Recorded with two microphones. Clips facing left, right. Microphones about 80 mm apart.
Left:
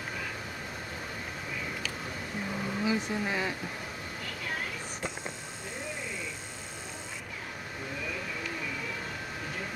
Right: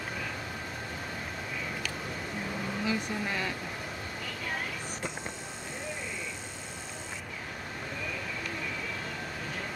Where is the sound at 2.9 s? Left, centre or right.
Centre.